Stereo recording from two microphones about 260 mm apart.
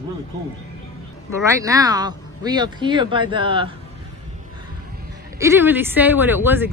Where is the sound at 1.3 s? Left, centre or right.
Centre.